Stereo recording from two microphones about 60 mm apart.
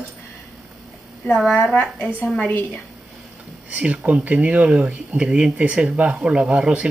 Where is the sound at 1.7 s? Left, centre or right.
Left.